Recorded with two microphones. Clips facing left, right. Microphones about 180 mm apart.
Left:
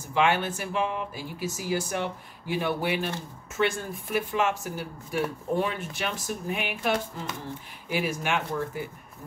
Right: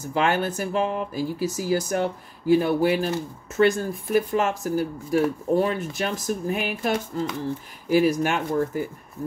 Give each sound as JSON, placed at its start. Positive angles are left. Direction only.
{"t": 0.1, "sound": "speech", "side_deg": -40}